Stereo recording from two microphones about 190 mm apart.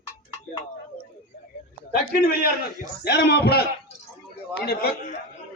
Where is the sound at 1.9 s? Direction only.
55° left (ahead or behind).